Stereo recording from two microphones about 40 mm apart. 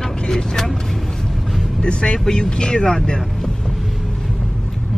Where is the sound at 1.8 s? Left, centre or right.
Left.